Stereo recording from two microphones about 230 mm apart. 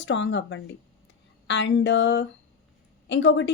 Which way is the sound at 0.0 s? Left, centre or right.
Left.